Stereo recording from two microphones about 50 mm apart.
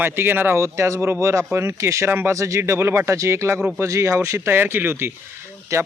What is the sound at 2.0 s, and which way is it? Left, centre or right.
Speech, right.